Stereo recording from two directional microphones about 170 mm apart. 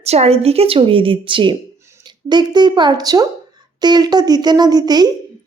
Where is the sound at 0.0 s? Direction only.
40° right (ahead or behind).